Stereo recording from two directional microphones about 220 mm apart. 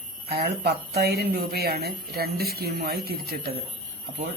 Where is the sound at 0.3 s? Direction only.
45° right (ahead or behind).